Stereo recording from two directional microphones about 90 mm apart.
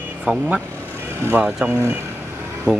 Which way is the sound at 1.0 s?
25° right (ahead or behind).